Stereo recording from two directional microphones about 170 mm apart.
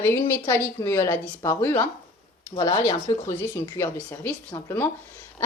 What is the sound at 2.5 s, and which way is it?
A woman's voice, 25° left (ahead or behind).